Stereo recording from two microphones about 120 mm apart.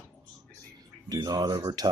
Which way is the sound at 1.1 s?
35° right (ahead or behind).